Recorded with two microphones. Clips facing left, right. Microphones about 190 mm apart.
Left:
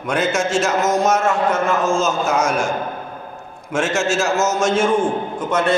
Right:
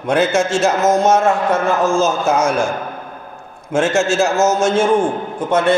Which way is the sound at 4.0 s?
30° right (ahead or behind).